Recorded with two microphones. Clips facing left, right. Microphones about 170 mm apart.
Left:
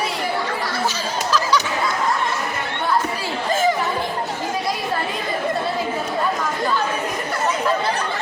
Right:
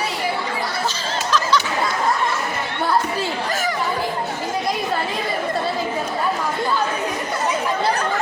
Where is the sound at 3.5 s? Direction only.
25° left (ahead or behind).